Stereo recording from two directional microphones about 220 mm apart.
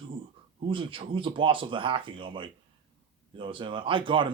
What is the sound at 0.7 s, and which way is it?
Speech, 25° right (ahead or behind).